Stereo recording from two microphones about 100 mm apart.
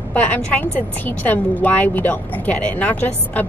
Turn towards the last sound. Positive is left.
turn(degrees=15)  # may be behind; listen again after turning